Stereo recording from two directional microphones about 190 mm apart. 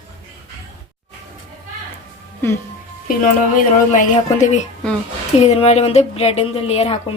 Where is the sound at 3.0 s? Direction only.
45° left (ahead or behind).